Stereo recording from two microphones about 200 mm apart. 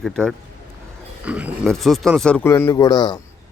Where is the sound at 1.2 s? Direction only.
5° right (ahead or behind); by 3.2 s 20° left (ahead or behind).